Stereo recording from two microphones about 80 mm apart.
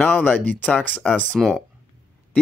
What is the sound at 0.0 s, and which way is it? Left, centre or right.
Speech, centre.